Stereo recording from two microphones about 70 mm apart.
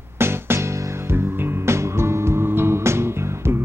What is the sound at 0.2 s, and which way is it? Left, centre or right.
Music, right.